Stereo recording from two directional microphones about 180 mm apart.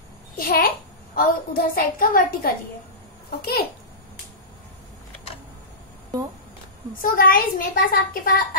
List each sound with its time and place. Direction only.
0.4 s a child's voice: 55° left (ahead or behind)
7.0 s a child's voice: 50° left (ahead or behind)